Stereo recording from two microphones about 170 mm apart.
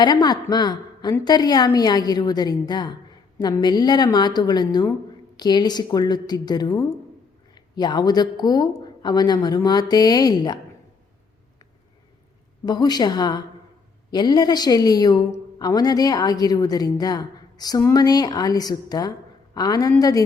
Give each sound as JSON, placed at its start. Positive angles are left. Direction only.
{"t": 0.0, "sound": "a woman's voice", "side_deg": 25}
{"t": 12.6, "sound": "a woman's voice", "side_deg": 25}